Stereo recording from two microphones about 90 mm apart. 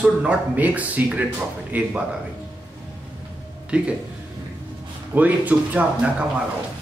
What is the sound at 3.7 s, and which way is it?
Speech, 10° right (ahead or behind).